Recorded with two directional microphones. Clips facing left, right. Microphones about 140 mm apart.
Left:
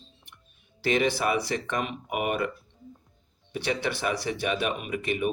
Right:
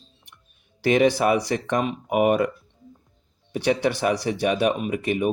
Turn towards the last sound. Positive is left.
turn(degrees=-40)  # may be behind; listen again after turning